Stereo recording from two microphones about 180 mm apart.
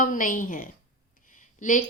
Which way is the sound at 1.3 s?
45° left (ahead or behind).